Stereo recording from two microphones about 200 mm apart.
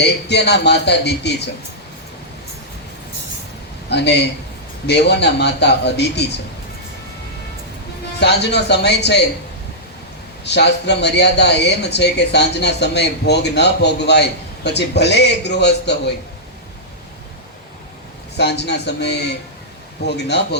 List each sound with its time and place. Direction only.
0.0 s speech: 55° left (ahead or behind)
3.8 s speech: 60° left (ahead or behind)
8.2 s speech: 55° left (ahead or behind)
10.4 s speech: 60° left (ahead or behind)
18.3 s speech: 60° left (ahead or behind)